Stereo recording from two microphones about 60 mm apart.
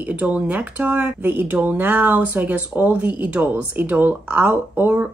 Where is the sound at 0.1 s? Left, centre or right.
Right.